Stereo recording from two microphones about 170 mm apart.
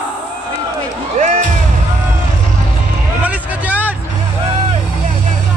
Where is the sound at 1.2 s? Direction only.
45° right (ahead or behind).